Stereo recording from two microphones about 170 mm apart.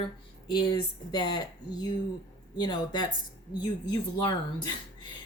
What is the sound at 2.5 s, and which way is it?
Speech, 25° left (ahead or behind).